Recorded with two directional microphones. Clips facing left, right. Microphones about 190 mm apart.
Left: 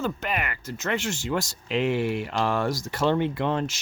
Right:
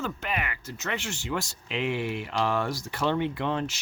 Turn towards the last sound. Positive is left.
turn(degrees=45)  # may be behind; listen again after turning